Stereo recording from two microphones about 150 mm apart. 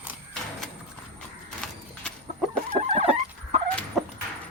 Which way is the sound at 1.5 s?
5° left (ahead or behind).